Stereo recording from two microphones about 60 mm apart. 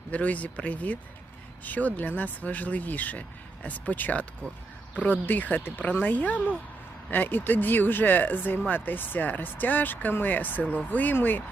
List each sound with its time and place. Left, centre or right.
0.1 s speech: left